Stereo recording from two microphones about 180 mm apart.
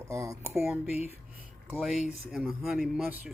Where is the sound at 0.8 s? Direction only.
35° left (ahead or behind).